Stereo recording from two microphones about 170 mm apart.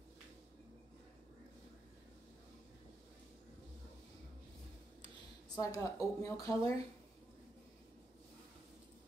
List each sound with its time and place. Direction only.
5.6 s speech: 20° left (ahead or behind)